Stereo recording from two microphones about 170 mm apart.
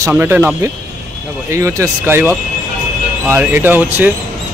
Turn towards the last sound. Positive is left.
turn(degrees=-10)  # may be behind; listen again after turning